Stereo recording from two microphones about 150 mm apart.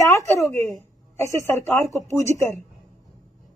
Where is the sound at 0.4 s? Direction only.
15° left (ahead or behind).